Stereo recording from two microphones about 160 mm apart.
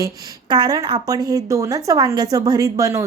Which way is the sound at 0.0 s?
25° right (ahead or behind).